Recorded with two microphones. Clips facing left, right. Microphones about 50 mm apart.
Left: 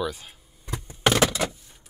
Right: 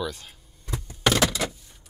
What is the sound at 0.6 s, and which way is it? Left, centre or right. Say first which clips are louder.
Door: left 1 dB; left.